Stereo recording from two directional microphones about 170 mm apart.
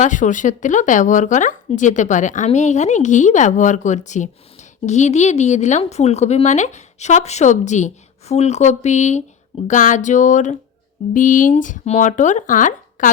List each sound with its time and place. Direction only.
0.0 s a woman's voice: 50° left (ahead or behind)